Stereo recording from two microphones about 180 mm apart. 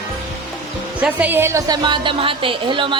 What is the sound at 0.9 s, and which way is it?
A woman's voice, 10° right (ahead or behind).